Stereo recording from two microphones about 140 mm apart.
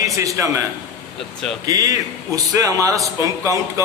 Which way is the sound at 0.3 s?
25° right (ahead or behind).